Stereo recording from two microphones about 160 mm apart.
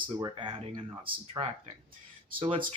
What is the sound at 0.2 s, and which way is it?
Speech, 30° right (ahead or behind).